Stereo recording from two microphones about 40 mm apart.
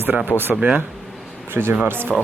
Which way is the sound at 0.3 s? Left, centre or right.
Left.